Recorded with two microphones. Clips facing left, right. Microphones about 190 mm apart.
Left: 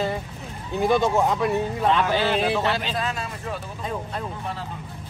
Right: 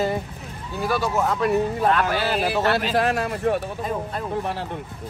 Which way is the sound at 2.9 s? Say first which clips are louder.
Right 7 dB; 70° right (ahead or behind).